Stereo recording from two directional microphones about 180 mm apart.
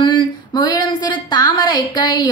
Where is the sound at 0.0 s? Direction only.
25° left (ahead or behind).